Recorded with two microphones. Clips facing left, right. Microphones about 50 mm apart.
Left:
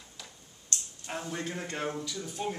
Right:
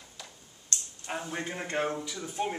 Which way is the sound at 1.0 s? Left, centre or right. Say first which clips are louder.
Right 2 dB; centre.